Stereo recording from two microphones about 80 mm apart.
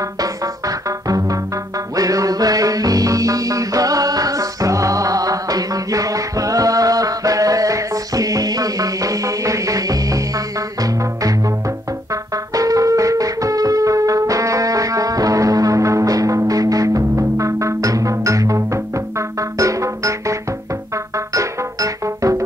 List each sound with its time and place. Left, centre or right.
0.2 s music: right